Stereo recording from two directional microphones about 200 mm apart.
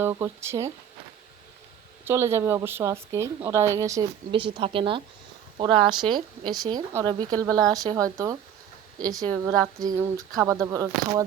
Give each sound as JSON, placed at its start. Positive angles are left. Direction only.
{"t": 0.0, "sound": "speech", "side_deg": -10}
{"t": 2.0, "sound": "a woman's voice", "side_deg": -10}